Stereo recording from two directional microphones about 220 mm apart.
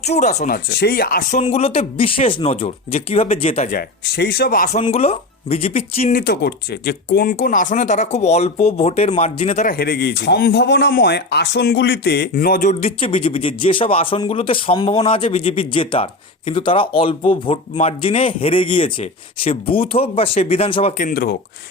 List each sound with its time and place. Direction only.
0.0 s speech: 30° left (ahead or behind)
1.4 s speech: 25° left (ahead or behind)
4.0 s speech: 50° left (ahead or behind); by 6.1 s 25° left (ahead or behind)
6.1 s speech: 45° left (ahead or behind); by 9.6 s 30° left (ahead or behind)
9.6 s speech: 45° left (ahead or behind)
12.8 s speech: 25° left (ahead or behind)
21.0 s speech: 45° left (ahead or behind)